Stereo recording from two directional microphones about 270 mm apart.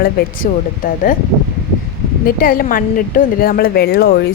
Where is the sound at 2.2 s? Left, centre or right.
Left.